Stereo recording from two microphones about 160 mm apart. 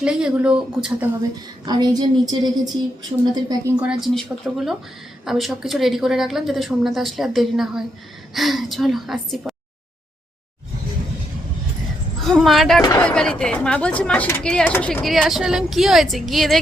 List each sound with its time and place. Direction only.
0.0 s speech: 5° right (ahead or behind)
1.6 s a woman's voice: 25° right (ahead or behind)
3.8 s speech: 5° right (ahead or behind)
12.2 s speech: centre (ahead or behind)